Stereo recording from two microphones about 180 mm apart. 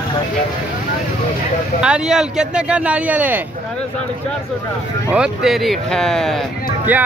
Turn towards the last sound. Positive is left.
turn(degrees=-10)  # may be behind; listen again after turning